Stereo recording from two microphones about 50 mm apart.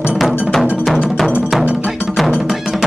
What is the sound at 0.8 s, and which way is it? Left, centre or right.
Music, centre.